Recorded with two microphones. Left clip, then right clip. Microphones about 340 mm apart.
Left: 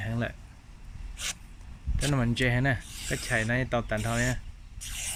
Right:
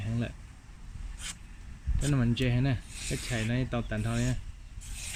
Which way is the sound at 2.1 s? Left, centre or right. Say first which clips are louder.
Left 4 dB; centre.